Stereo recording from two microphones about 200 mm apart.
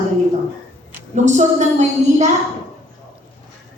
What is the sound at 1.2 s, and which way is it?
A woman's voice, 35° right (ahead or behind).